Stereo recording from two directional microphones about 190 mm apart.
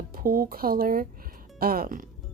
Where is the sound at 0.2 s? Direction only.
50° right (ahead or behind).